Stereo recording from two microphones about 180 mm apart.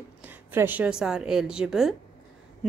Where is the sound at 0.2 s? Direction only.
10° right (ahead or behind).